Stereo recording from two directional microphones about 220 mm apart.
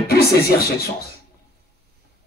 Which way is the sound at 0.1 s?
45° left (ahead or behind).